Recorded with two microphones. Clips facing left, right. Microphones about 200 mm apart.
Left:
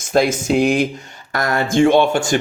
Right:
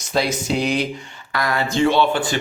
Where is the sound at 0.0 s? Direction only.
50° left (ahead or behind).